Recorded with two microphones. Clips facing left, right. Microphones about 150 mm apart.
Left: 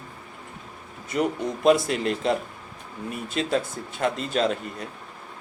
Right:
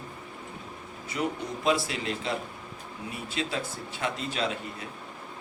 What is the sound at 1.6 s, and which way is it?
A man's voice, 50° left (ahead or behind).